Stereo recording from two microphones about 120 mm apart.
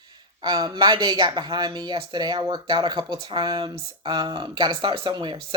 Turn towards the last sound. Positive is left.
turn(degrees=-40)  # may be behind; listen again after turning